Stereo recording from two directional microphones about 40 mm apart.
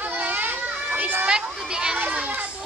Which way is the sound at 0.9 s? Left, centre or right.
Right.